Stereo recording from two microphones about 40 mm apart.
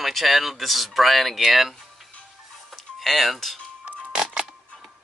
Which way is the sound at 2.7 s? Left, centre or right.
Centre.